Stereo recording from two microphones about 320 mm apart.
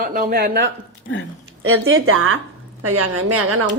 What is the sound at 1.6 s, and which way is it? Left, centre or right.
A woman's voice, right.